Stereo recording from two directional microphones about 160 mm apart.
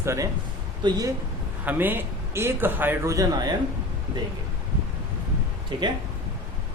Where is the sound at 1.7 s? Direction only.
10° right (ahead or behind).